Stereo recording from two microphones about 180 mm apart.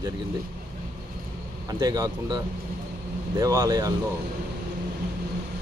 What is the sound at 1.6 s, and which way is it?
Speech, 20° right (ahead or behind).